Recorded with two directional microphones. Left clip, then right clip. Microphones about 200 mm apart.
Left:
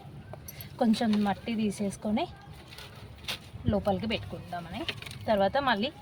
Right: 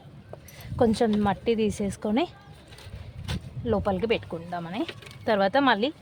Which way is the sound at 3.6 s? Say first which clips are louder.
Right 5 dB; 45° right (ahead or behind).